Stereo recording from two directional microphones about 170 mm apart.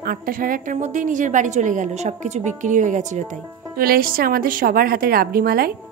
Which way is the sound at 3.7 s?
60° right (ahead or behind).